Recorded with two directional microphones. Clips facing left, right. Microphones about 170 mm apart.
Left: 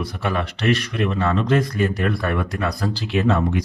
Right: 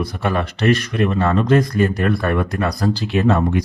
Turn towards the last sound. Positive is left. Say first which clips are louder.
# right 3 dB
turn(degrees=-45)  # may be behind; listen again after turning